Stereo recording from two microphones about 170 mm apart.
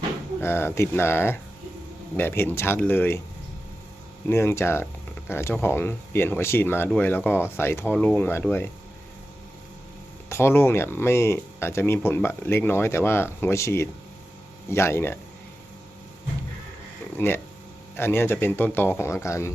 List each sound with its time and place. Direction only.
0.4 s speech: 15° left (ahead or behind)
4.3 s speech: 15° left (ahead or behind)
10.2 s speech: 15° left (ahead or behind)
17.2 s speech: 15° left (ahead or behind)